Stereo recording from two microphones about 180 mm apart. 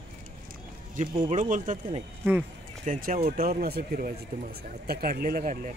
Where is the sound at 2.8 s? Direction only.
45° right (ahead or behind).